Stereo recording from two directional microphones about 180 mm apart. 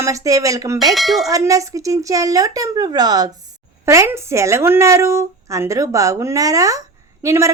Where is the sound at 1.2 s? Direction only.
20° right (ahead or behind).